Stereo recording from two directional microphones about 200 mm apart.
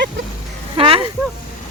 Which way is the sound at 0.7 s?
25° right (ahead or behind).